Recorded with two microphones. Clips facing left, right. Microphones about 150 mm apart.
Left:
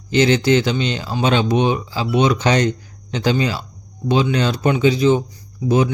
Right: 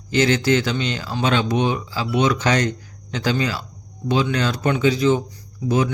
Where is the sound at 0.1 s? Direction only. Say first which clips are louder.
Left 3 dB; 20° left (ahead or behind).